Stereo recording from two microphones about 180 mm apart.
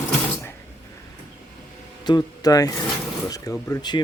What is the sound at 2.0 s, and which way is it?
Speech, 20° left (ahead or behind).